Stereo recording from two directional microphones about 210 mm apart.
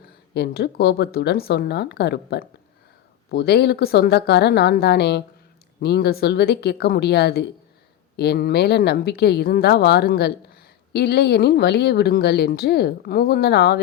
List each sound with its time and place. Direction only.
0.3 s speech: 50° left (ahead or behind)